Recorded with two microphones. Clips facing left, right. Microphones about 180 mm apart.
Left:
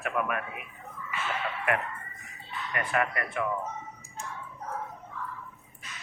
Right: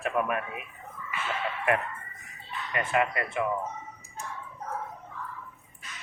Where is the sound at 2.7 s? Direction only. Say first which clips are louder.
Right 2 dB; 25° right (ahead or behind).